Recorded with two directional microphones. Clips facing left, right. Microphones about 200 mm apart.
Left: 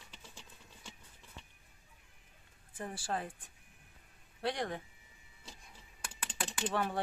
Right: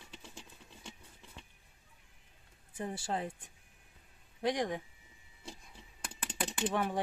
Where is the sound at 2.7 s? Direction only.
20° right (ahead or behind).